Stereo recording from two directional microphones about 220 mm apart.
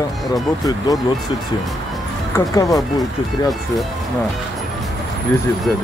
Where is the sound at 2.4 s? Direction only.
15° left (ahead or behind).